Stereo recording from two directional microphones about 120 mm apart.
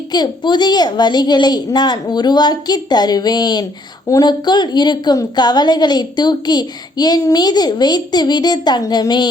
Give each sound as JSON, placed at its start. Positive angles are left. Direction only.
{"t": 0.1, "sound": "a woman's voice", "side_deg": 35}